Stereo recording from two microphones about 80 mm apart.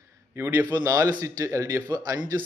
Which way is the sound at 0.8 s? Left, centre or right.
Right.